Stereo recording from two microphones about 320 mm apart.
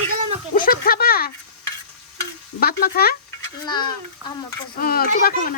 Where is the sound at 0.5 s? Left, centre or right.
Left.